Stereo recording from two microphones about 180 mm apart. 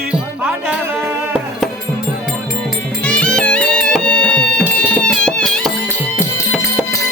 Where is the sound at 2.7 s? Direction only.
Centre (ahead or behind).